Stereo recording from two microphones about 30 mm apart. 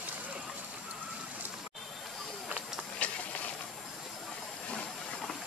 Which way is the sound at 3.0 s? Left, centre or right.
Left.